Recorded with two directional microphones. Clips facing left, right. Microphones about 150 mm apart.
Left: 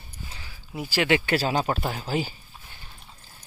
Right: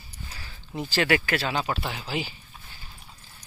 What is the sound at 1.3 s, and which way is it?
Speech, 40° left (ahead or behind).